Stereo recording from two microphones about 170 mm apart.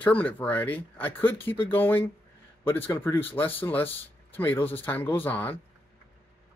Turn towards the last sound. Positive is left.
turn(degrees=10)  # may be behind; listen again after turning